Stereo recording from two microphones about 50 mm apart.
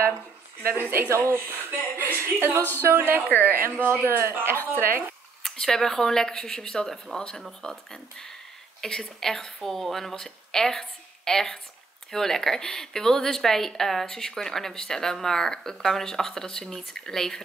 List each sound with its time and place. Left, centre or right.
0.7 s speech: right
1.1 s speech: right
1.5 s speech: right
2.9 s speech: right
3.3 s a woman's voice: left
3.7 s speech: right
5.4 s a woman's voice: centre